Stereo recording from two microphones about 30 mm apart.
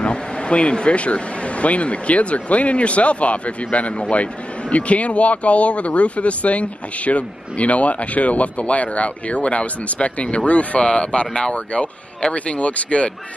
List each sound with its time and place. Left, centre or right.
0.0 s speech: left
10.8 s speech: left